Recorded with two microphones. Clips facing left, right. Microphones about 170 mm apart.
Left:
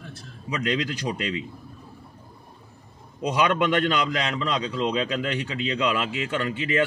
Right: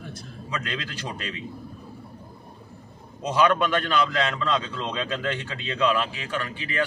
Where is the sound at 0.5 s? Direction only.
15° left (ahead or behind).